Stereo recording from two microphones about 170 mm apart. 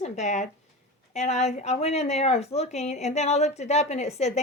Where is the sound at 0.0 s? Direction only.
45° left (ahead or behind).